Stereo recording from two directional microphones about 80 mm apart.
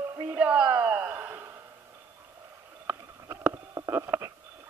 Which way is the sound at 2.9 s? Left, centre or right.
Right.